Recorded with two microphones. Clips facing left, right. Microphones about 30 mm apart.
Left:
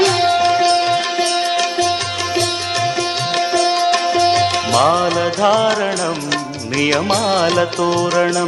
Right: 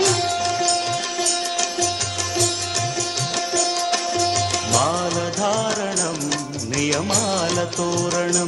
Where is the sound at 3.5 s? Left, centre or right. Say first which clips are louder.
Left 7 dB; left.